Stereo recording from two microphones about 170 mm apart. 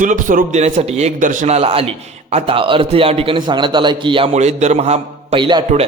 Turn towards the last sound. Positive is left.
turn(degrees=-25)  # may be behind; listen again after turning